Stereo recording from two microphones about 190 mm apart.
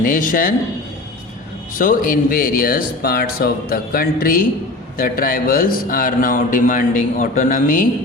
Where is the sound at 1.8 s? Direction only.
45° left (ahead or behind).